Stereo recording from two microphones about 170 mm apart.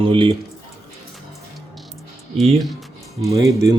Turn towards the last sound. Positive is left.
turn(degrees=-20)  # may be behind; listen again after turning